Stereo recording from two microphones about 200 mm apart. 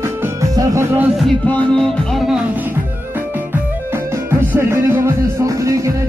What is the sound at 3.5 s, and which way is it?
Music, 10° right (ahead or behind).